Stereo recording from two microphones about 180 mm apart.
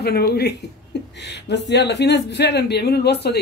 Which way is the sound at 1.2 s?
75° left (ahead or behind).